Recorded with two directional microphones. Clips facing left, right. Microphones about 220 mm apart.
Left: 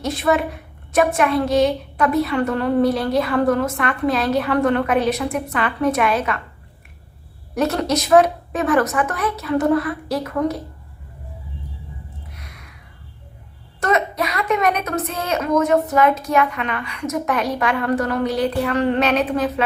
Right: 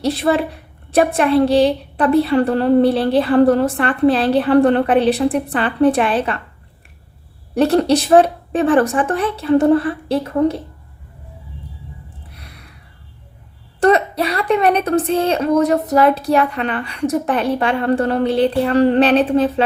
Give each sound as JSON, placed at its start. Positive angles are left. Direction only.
{"t": 0.0, "sound": "a woman's voice", "side_deg": -35}
{"t": 7.5, "sound": "a woman's voice", "side_deg": -30}
{"t": 12.3, "sound": "a sound", "side_deg": -30}
{"t": 13.7, "sound": "a woman's voice", "side_deg": -35}